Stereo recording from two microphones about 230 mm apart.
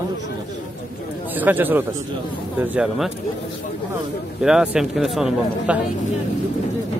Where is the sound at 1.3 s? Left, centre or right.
Centre.